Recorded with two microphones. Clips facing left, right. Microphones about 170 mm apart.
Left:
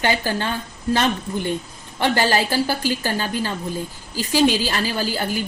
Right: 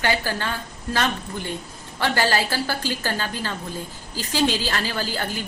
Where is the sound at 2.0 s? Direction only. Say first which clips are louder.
Left 3 dB; 20° left (ahead or behind).